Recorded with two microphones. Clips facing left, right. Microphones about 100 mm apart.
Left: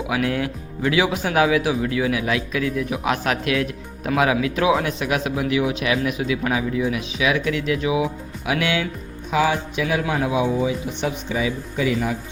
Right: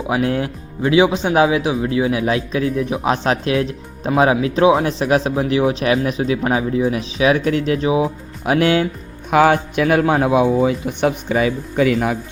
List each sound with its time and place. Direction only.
0.1 s a man's voice: 30° right (ahead or behind)
9.3 s a man's voice: 60° right (ahead or behind)